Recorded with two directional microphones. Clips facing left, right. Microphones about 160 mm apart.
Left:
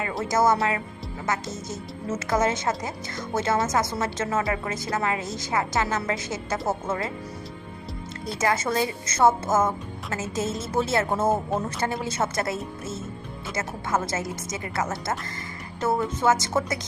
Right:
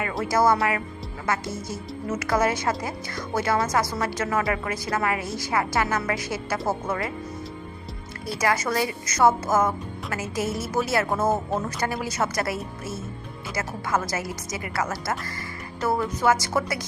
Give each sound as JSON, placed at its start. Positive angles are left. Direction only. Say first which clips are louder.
{"t": 0.2, "sound": "speech", "louder": "right 1 dB", "side_deg": 20}
{"t": 8.4, "sound": "speech", "louder": "even", "side_deg": 25}